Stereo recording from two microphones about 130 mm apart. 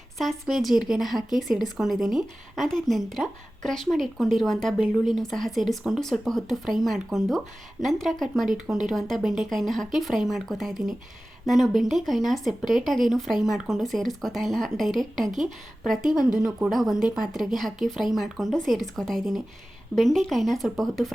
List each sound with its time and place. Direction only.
0.2 s speech: centre (ahead or behind)